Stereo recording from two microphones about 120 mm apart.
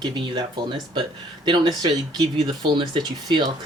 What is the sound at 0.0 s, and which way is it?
Speech, 40° right (ahead or behind).